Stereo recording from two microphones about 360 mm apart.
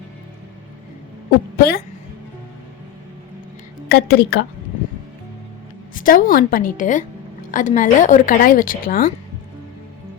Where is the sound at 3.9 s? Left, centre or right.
Left.